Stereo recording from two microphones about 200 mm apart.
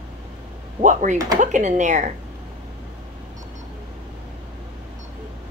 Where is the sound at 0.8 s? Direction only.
40° right (ahead or behind).